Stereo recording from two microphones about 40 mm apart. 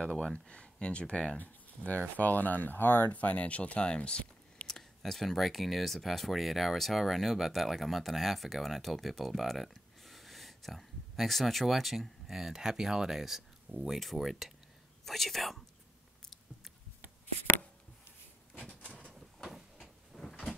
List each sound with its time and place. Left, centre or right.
0.0 s speech: left
3.1 s speech: left
3.9 s a sound: left
4.6 s speech: centre
19.1 s vehicle: centre
19.8 s cupboard open or close: centre